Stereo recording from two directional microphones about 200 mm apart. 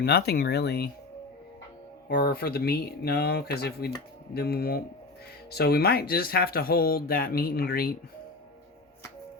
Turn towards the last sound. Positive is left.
turn(degrees=50)  # may be behind; listen again after turning